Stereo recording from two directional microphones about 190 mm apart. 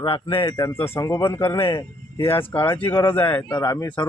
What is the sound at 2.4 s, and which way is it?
Speech, 30° left (ahead or behind).